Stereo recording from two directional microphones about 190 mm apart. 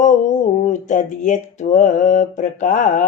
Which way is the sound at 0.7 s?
40° left (ahead or behind).